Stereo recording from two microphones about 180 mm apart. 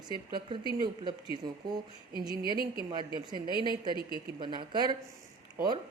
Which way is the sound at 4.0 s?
60° right (ahead or behind).